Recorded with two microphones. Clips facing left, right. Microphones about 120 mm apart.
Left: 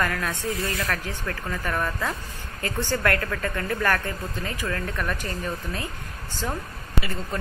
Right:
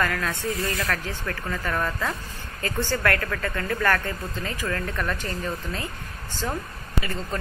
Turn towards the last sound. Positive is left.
turn(degrees=10)  # may be behind; listen again after turning